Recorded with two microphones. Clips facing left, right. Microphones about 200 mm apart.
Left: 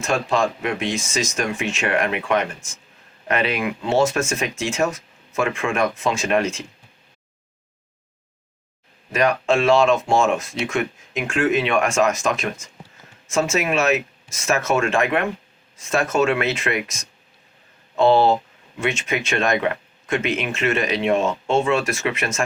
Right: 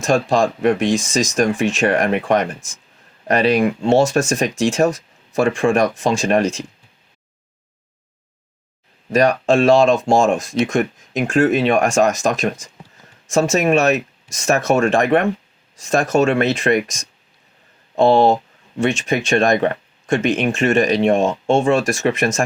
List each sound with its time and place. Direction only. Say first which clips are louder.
0.0 s speech: right 5 dB; 35° right (ahead or behind)
9.1 s speech: right 4 dB; 40° right (ahead or behind)
18.8 s speech: right 5 dB; 35° right (ahead or behind)
20.4 s speech: right 6 dB; 45° right (ahead or behind)
21.2 s speech: right 4 dB; 30° right (ahead or behind)